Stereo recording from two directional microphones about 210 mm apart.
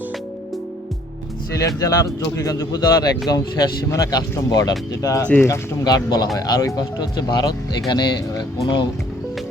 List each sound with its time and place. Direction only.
1.5 s speech: 15° left (ahead or behind)